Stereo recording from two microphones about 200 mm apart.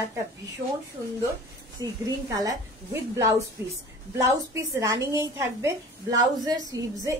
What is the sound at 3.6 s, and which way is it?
A woman's voice, 10° right (ahead or behind).